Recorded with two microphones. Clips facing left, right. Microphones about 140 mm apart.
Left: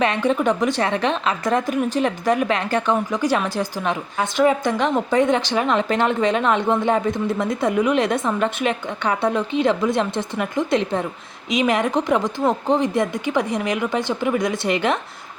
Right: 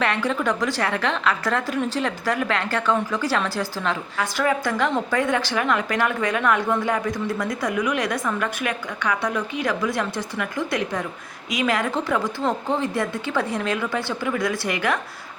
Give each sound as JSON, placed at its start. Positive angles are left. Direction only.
{"t": 0.0, "sound": "a woman's voice", "side_deg": 20}